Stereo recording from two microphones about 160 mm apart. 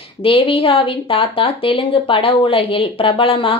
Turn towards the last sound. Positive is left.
turn(degrees=35)  # may be behind; listen again after turning